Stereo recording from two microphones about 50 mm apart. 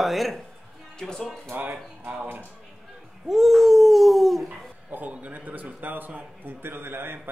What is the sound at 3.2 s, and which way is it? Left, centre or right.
A man's voice, centre.